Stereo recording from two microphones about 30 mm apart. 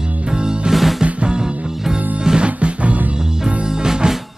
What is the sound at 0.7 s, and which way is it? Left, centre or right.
Music, centre.